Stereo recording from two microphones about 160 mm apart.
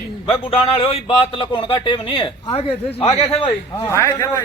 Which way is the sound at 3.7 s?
15° left (ahead or behind).